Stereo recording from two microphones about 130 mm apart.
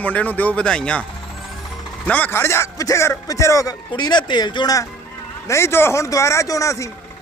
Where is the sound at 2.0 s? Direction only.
10° left (ahead or behind); by 4.8 s 30° left (ahead or behind).